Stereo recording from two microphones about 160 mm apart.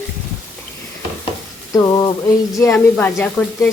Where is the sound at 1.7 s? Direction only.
25° left (ahead or behind).